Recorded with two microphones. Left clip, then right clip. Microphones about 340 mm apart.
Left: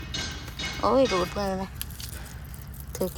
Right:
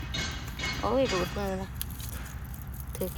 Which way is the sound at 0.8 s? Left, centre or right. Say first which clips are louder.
Left 6 dB; centre.